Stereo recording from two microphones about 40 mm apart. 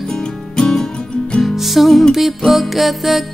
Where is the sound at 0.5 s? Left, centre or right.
Centre.